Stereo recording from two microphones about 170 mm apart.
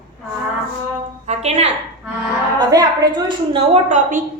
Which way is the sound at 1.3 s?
40° right (ahead or behind).